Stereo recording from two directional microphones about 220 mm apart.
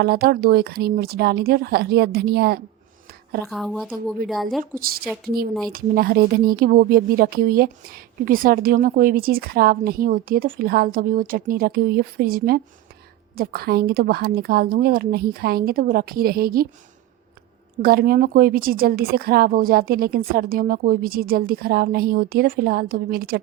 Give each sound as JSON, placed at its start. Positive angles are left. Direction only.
{"t": 0.0, "sound": "a woman's voice", "side_deg": -45}
{"t": 3.4, "sound": "speech", "side_deg": 0}
{"t": 4.6, "sound": "a woman's voice", "side_deg": -40}
{"t": 17.8, "sound": "a woman's voice", "side_deg": -40}